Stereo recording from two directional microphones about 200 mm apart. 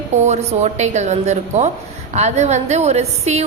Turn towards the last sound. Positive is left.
turn(degrees=-35)  # may be behind; listen again after turning